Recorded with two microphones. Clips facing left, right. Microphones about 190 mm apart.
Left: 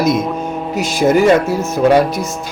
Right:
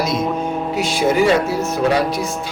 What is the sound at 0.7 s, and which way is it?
Speech, 45° left (ahead or behind).